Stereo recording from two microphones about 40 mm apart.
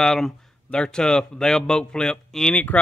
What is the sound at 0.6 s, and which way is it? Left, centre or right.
A man's voice, left.